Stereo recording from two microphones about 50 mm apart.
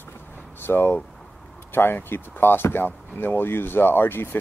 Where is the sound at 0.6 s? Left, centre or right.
Left.